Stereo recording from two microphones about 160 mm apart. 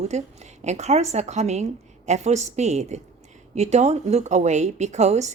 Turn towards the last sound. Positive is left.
turn(degrees=-45)  # may be behind; listen again after turning